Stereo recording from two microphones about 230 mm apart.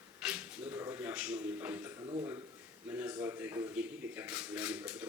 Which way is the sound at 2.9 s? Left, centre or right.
Centre.